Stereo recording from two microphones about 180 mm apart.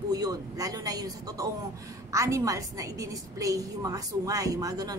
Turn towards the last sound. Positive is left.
turn(degrees=-20)  # may be behind; listen again after turning